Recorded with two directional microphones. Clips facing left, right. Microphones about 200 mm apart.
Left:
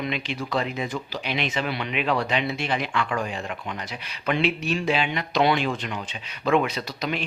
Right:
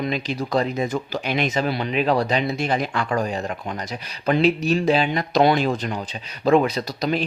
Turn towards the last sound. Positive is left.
turn(degrees=-35)  # may be behind; listen again after turning